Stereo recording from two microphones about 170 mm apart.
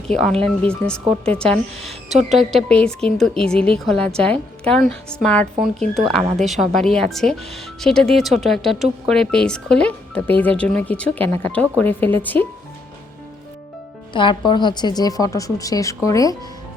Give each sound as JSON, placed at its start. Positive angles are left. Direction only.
{"t": 0.1, "sound": "speech", "side_deg": 5}
{"t": 14.1, "sound": "a woman's voice", "side_deg": 30}